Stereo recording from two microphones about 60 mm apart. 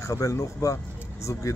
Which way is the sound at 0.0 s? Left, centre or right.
Left.